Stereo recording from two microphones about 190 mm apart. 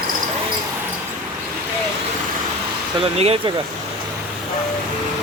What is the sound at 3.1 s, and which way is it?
Speech, 30° right (ahead or behind).